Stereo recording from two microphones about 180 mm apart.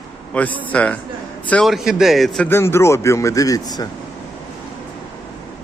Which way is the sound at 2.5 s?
15° left (ahead or behind).